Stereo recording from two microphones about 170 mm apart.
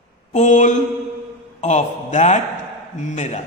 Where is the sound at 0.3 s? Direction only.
45° left (ahead or behind).